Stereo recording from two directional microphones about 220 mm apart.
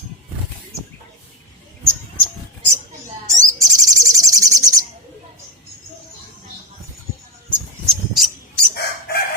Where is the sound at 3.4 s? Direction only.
15° right (ahead or behind).